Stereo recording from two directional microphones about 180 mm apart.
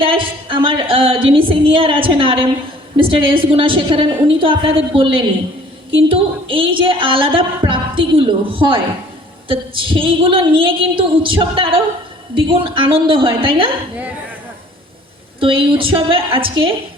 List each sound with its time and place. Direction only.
0.0 s a woman's voice: 30° right (ahead or behind)
15.4 s a woman's voice: 30° right (ahead or behind)